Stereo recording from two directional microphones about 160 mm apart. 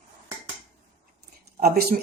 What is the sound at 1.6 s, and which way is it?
Speech, 75° right (ahead or behind).